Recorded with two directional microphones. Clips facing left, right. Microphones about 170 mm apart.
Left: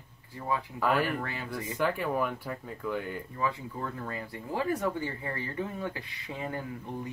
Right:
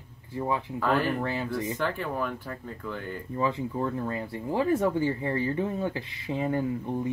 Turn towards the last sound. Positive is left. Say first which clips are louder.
# right 8 dB
turn(degrees=-25)  # may be behind; listen again after turning